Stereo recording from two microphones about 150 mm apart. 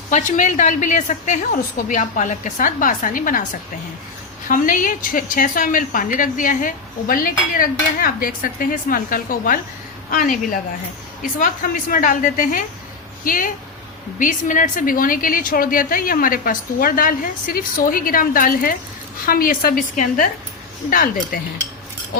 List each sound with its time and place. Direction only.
0.1 s a woman's voice: 55° left (ahead or behind)